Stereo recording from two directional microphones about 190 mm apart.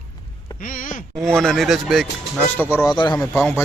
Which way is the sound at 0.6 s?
45° left (ahead or behind).